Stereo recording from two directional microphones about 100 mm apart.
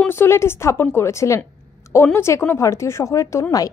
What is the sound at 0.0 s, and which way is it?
A woman's voice, 25° left (ahead or behind).